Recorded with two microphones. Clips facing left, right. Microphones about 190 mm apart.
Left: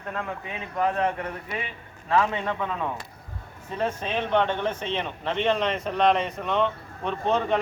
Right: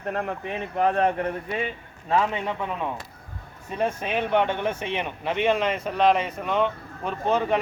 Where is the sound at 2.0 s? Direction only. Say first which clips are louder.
Even; 20° right (ahead or behind).